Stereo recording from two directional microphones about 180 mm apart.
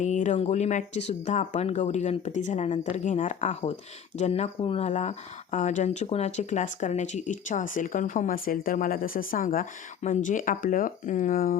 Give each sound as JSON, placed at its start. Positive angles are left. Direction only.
{"t": 0.0, "sound": "speech", "side_deg": 40}